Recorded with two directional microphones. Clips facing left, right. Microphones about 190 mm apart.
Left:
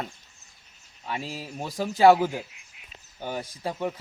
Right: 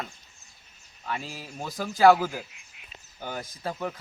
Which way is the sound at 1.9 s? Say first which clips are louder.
Left 1 dB; 25° left (ahead or behind).